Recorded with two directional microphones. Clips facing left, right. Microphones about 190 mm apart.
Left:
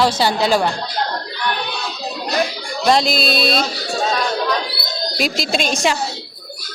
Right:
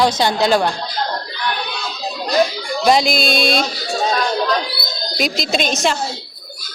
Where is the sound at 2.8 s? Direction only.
Centre (ahead or behind).